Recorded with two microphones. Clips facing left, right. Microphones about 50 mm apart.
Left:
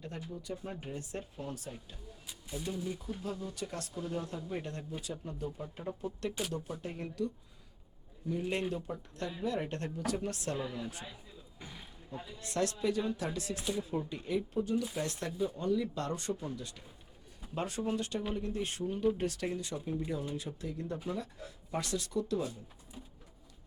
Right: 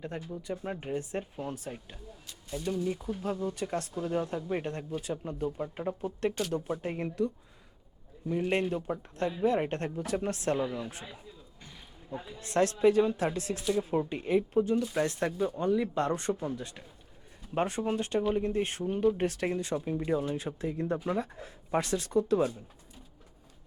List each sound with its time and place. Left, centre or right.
0.0 s speech: right
2.2 s speech: centre
2.8 s speech: right
8.3 s speech: right
12.1 s speech: right